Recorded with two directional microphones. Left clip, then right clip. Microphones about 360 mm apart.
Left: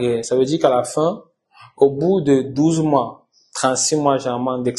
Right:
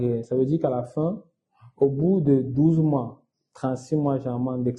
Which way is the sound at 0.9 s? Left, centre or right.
Left.